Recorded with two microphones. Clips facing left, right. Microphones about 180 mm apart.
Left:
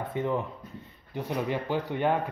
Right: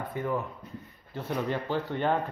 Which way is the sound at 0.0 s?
25° left (ahead or behind).